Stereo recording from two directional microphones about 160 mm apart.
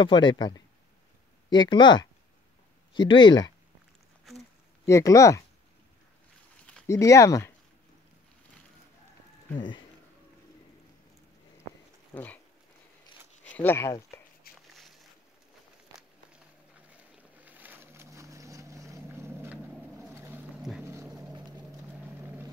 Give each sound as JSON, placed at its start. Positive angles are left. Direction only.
{"t": 0.0, "sound": "speech", "side_deg": 30}
{"t": 4.8, "sound": "speech", "side_deg": 20}
{"t": 6.9, "sound": "speech", "side_deg": 20}
{"t": 12.1, "sound": "a sound", "side_deg": 10}
{"t": 13.4, "sound": "speech", "side_deg": 10}
{"t": 14.5, "sound": "a sound", "side_deg": 70}
{"t": 14.8, "sound": "boat", "side_deg": 0}
{"t": 15.9, "sound": "walk", "side_deg": -20}
{"t": 16.9, "sound": "boat", "side_deg": -10}
{"t": 22.0, "sound": "vehicle", "side_deg": -15}